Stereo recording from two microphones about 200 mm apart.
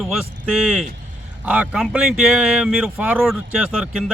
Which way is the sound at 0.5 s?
5° right (ahead or behind).